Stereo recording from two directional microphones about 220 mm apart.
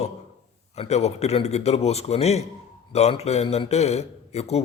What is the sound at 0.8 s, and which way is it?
A man's voice, 30° left (ahead or behind).